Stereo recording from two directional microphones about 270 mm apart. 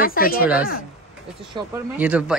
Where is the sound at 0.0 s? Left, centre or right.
Left.